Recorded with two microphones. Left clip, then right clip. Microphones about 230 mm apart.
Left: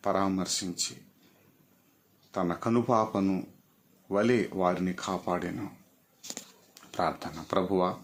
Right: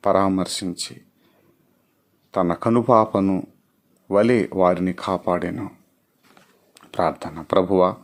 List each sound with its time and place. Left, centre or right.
0.0 s speech: right
2.3 s speech: right
6.7 s speech: right